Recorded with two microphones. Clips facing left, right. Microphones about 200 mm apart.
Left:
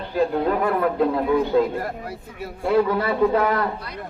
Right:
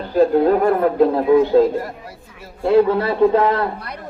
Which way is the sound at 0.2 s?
40° right (ahead or behind).